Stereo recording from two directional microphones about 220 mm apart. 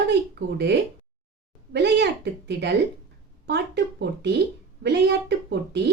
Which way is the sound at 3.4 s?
50° right (ahead or behind).